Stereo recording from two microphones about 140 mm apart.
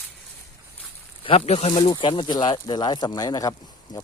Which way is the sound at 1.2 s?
40° left (ahead or behind).